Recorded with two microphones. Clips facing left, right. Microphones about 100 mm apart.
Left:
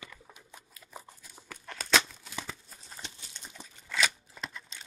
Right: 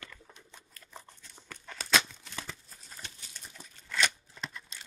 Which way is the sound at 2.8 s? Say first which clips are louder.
Left 2 dB; 20° left (ahead or behind).